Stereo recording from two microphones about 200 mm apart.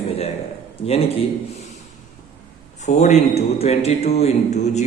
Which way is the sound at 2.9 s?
35° left (ahead or behind).